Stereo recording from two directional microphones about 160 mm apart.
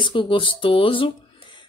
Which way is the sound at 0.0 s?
30° left (ahead or behind).